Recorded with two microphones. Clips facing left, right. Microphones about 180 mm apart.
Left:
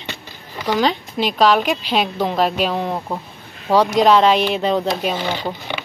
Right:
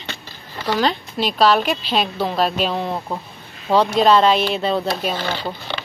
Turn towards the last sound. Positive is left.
turn(degrees=15)  # may be behind; listen again after turning